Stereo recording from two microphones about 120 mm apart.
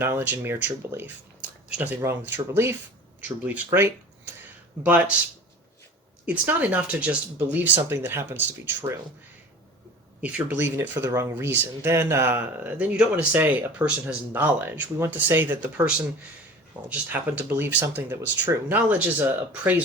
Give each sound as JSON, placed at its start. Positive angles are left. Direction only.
{"t": 0.0, "sound": "speech", "side_deg": -15}
{"t": 6.2, "sound": "speech", "side_deg": -15}
{"t": 10.2, "sound": "speech", "side_deg": -10}
{"t": 16.9, "sound": "speech", "side_deg": -15}